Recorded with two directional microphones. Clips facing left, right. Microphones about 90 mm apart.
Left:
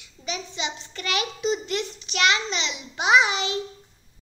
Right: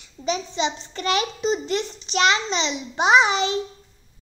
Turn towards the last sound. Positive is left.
turn(degrees=-35)  # may be behind; listen again after turning